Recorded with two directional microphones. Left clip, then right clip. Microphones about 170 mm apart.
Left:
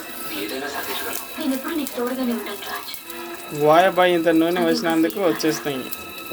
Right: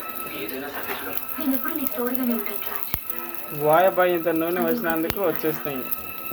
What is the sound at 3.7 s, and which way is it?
Speech, 10° left (ahead or behind).